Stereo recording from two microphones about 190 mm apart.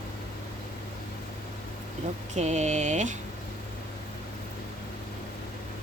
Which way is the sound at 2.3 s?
35° right (ahead or behind).